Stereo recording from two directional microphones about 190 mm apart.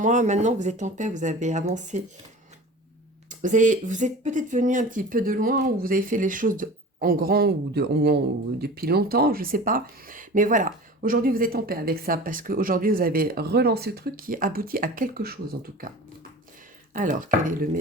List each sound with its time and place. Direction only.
0.0 s speech: 40° right (ahead or behind)
3.2 s speech: 40° right (ahead or behind)
16.9 s speech: 45° right (ahead or behind)